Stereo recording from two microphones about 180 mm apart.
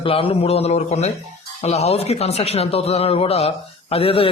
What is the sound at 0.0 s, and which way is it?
A man's voice, 30° left (ahead or behind).